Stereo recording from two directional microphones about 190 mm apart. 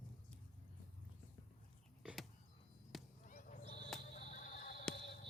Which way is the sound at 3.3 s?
40° left (ahead or behind).